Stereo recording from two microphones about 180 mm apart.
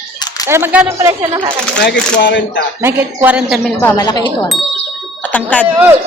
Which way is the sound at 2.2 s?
80° left.